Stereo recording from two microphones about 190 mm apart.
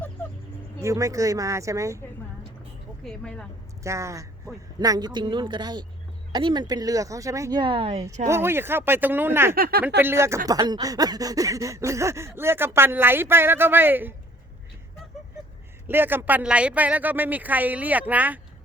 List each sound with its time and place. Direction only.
0.8 s speech: 15° right (ahead or behind)
3.0 s speech: 5° left (ahead or behind)
3.8 s speech: 15° right (ahead or behind)
8.3 s speech: 10° right (ahead or behind)
9.6 s speech: 50° right (ahead or behind)
10.0 s speech: 15° right (ahead or behind)
15.9 s speech: 10° right (ahead or behind)